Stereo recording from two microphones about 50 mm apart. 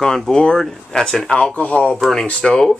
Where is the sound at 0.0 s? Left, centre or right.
Centre.